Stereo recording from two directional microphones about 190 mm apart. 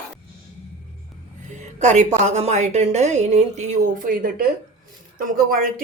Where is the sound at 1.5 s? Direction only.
40° right (ahead or behind).